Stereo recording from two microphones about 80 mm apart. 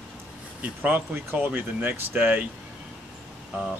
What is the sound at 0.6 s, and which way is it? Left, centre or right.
Speech, right.